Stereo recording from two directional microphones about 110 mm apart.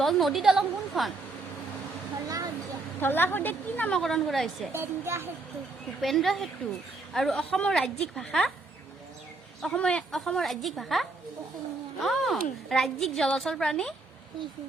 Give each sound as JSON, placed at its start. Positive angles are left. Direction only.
{"t": 0.0, "sound": "a woman's voice", "side_deg": 0}
{"t": 2.2, "sound": "a sound", "side_deg": -35}
{"t": 3.0, "sound": "a woman's voice", "side_deg": 20}
{"t": 3.9, "sound": "a woman's voice", "side_deg": 5}
{"t": 4.7, "sound": "a child's voice", "side_deg": -20}
{"t": 6.0, "sound": "a woman's voice", "side_deg": 0}
{"t": 9.6, "sound": "a woman's voice", "side_deg": 5}